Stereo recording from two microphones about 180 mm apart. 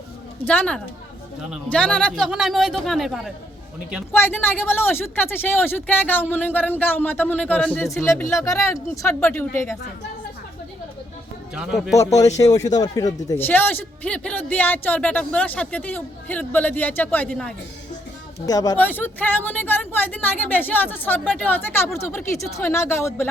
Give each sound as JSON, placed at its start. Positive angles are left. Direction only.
{"t": 0.4, "sound": "a man's voice", "side_deg": 5}
{"t": 4.1, "sound": "speech", "side_deg": 10}
{"t": 11.5, "sound": "a man's voice", "side_deg": -5}
{"t": 11.9, "sound": "speech", "side_deg": 15}
{"t": 18.4, "sound": "speech", "side_deg": 20}
{"t": 18.8, "sound": "speech", "side_deg": 10}